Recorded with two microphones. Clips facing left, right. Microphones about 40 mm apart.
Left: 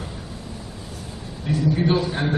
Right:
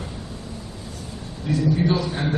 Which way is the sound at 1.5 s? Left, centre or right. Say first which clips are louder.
Even; left.